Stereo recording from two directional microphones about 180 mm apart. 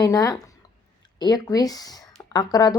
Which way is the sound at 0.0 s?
20° left (ahead or behind).